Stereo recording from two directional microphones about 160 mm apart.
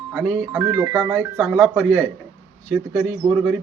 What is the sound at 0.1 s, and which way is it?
A man's voice, 5° right (ahead or behind).